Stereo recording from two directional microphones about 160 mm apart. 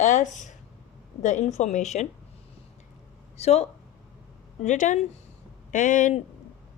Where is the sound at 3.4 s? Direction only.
40° left (ahead or behind).